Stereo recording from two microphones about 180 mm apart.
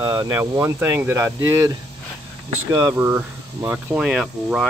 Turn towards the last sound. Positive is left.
turn(degrees=-5)  # may be behind; listen again after turning